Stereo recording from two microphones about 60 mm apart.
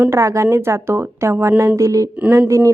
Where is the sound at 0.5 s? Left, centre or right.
Right.